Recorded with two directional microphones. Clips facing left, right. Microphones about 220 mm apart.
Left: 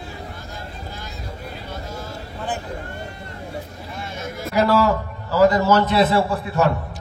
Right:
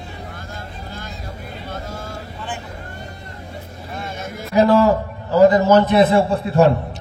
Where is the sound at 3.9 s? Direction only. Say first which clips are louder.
Right 3 dB; 50° right (ahead or behind).